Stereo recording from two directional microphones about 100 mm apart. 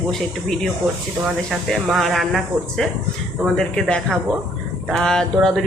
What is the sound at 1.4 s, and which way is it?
Speech, centre (ahead or behind).